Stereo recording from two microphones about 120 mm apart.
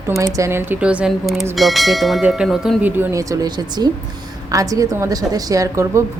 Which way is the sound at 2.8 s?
15° right (ahead or behind).